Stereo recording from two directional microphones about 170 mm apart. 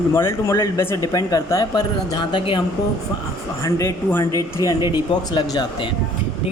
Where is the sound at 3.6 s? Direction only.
20° left (ahead or behind).